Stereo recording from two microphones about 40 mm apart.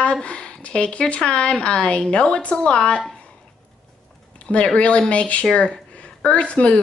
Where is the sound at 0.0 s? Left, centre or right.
Left.